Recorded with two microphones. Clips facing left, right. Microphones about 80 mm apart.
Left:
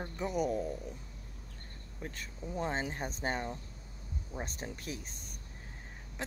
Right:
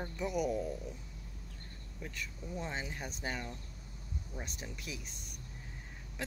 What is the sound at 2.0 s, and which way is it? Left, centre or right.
Speech, left.